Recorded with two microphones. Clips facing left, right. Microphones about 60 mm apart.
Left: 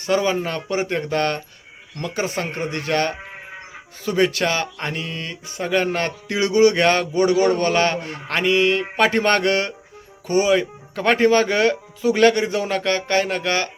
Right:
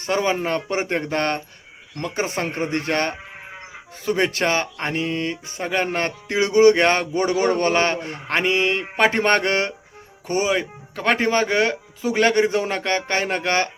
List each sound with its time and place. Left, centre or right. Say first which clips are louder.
0.0 s speech: left 1 dB; right
2.2 s speech: right 1 dB; right
10.9 s speech: left 2 dB; centre
11.2 s speech: left 5 dB; right